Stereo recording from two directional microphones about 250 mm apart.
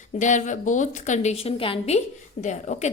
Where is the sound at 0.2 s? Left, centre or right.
Left.